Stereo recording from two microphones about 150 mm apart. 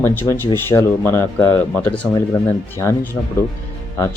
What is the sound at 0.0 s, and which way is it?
Speech, 15° left (ahead or behind).